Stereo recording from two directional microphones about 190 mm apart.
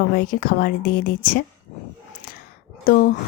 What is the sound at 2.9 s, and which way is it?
Speech, 50° left (ahead or behind).